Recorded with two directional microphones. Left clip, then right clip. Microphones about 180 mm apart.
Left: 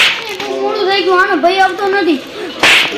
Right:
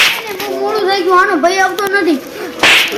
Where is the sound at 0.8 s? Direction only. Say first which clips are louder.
Even; 20° right (ahead or behind).